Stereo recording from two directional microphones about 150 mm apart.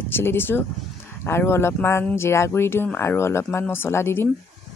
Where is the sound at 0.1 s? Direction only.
15° left (ahead or behind).